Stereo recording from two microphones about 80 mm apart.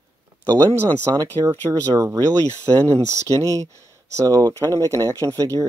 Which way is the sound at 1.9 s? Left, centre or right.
Right.